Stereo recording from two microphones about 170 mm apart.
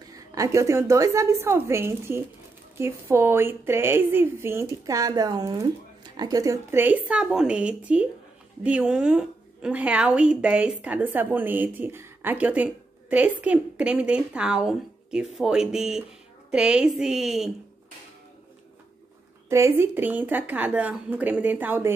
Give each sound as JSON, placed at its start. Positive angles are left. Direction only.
{"t": 0.1, "sound": "a woman's voice", "side_deg": -20}
{"t": 19.5, "sound": "a woman's voice", "side_deg": -15}